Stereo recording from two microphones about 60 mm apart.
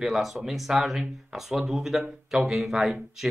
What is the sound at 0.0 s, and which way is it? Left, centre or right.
Speech, centre.